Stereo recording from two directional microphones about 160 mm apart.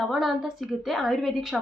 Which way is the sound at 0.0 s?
Centre (ahead or behind).